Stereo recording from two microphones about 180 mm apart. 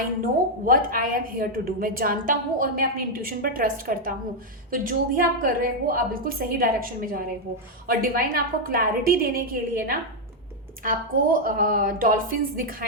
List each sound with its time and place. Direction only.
0.2 s a woman's voice: 50° right (ahead or behind)